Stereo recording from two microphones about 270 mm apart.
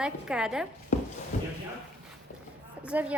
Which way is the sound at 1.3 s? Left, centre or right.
Left.